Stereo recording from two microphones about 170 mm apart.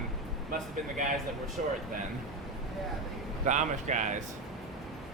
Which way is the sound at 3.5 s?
45° right (ahead or behind).